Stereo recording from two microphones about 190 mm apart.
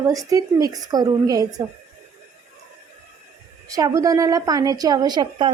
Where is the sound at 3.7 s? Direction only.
20° right (ahead or behind).